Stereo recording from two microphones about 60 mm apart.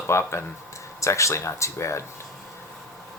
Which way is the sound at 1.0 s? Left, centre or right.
Left.